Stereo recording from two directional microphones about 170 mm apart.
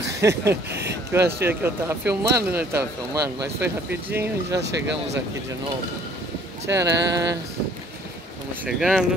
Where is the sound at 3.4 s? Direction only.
75° right (ahead or behind).